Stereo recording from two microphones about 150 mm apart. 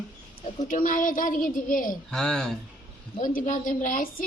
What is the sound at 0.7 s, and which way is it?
A woman's voice, 65° left (ahead or behind).